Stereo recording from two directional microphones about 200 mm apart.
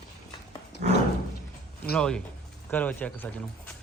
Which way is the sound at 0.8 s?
45° right (ahead or behind).